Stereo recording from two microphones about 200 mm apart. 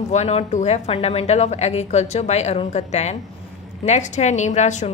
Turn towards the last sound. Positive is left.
turn(degrees=35)  # may be behind; listen again after turning